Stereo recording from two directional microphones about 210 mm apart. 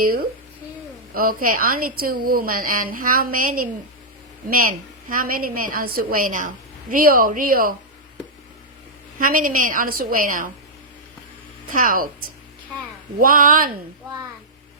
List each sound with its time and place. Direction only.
0.0 s a woman's voice: 45° right (ahead or behind)
5.0 s a woman's voice: 40° right (ahead or behind)
9.1 s a woman's voice: 40° right (ahead or behind)
11.7 s a woman's voice: 40° right (ahead or behind)